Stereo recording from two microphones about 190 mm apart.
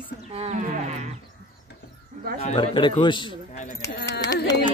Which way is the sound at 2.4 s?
25° left (ahead or behind).